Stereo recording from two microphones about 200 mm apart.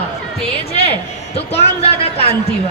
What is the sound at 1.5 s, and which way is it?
Speech, 30° left (ahead or behind).